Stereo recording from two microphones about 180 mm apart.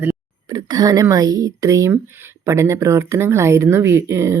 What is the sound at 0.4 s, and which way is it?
Speech, 25° right (ahead or behind).